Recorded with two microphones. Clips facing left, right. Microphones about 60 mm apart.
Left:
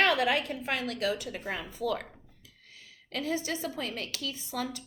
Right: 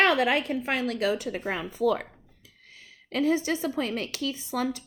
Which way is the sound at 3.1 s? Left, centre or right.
Right.